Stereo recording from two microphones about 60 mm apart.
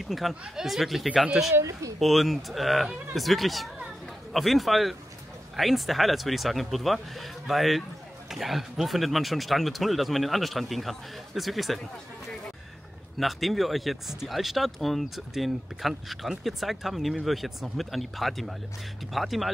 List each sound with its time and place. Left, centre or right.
0.0 s speech: centre
1.5 s speech: right
2.0 s speech: centre
13.2 s speech: centre